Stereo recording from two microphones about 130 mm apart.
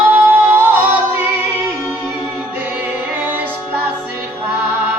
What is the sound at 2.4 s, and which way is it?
A capella, 15° right (ahead or behind).